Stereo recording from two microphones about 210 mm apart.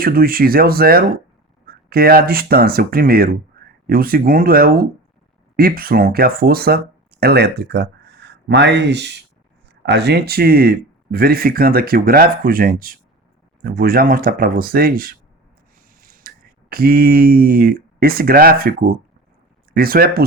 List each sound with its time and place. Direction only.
0.0 s speech: 45° right (ahead or behind)